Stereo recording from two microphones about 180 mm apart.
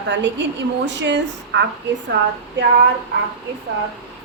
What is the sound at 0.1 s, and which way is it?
A woman's voice, 75° right (ahead or behind).